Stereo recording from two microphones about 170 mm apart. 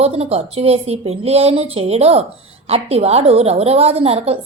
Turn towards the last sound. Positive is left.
turn(degrees=-35)  # may be behind; listen again after turning